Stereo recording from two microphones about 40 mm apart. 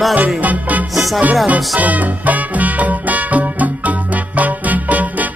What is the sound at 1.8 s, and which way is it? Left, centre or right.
Music, right.